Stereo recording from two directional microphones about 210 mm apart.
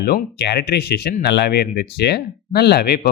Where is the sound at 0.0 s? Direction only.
50° left (ahead or behind).